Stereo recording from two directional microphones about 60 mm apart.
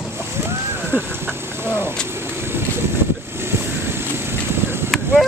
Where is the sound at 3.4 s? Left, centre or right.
Right.